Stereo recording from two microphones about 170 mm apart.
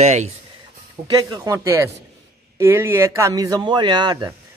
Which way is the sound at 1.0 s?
25° right (ahead or behind).